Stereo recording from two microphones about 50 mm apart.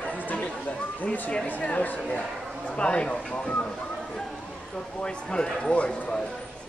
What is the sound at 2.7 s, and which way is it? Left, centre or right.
Speech, left.